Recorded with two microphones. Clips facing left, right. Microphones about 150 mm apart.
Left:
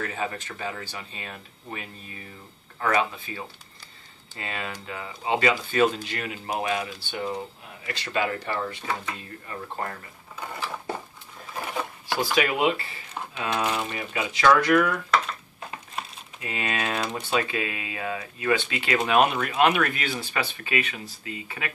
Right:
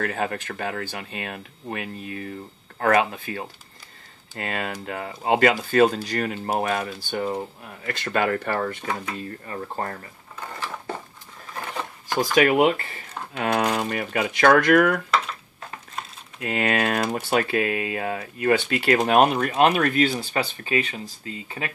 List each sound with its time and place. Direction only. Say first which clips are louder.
0.0 s speech: right 4 dB; 60° right (ahead or behind)
9.8 s speech: right 2 dB; 40° right (ahead or behind)
12.4 s speech: right 7 dB; 55° right (ahead or behind)
16.3 s speech: right 7 dB; 60° right (ahead or behind); by 21.7 s 35° right (ahead or behind)